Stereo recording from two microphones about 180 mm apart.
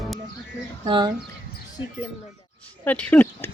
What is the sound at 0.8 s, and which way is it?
Speech, 25° right (ahead or behind).